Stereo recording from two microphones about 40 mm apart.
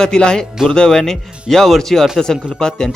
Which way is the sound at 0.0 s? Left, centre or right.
Centre.